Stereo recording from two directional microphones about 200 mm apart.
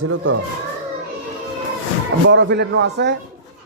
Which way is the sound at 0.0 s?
90° right.